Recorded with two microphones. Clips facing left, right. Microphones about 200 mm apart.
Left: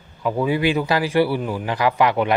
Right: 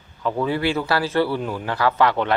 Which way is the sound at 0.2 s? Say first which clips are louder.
Left 2 dB; 10° left (ahead or behind).